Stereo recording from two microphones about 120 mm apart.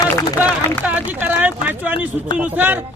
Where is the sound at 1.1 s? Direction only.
15° right (ahead or behind).